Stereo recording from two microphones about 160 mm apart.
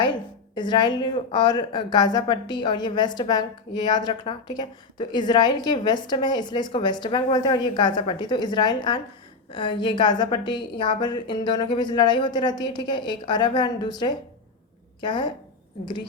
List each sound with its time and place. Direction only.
0.5 s a woman's voice: 25° left (ahead or behind)